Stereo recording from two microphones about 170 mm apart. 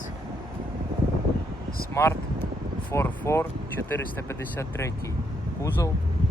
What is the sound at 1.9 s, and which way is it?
Speech, 15° left (ahead or behind).